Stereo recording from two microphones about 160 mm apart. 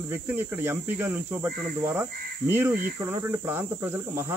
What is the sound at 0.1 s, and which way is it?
Speech, 15° right (ahead or behind).